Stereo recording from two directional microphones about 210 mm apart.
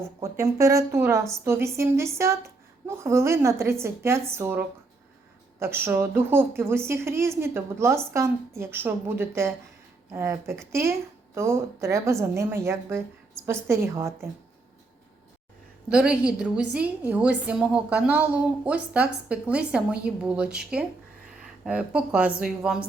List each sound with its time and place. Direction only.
0.2 s a woman's voice: 15° right (ahead or behind)
15.9 s a woman's voice: 5° right (ahead or behind)